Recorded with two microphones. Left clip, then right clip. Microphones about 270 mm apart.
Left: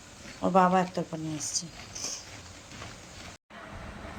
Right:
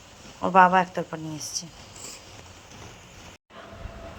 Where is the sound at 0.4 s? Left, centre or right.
Centre.